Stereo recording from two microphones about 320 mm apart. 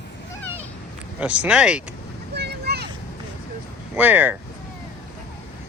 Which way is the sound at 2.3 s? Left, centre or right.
Right.